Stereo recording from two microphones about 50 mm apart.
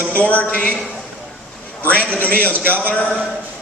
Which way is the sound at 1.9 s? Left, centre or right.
Left.